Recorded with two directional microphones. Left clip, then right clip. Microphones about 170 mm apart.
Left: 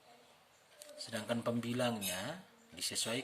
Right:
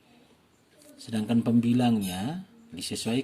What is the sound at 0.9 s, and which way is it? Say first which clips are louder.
Speech: right 9 dB; 15° right (ahead or behind).